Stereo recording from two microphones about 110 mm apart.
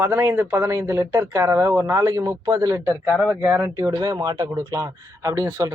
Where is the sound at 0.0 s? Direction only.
20° right (ahead or behind).